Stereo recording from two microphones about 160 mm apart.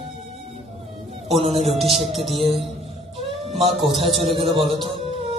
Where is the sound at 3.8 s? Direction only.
Centre (ahead or behind).